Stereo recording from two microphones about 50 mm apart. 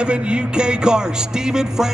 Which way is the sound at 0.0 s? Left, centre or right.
Right.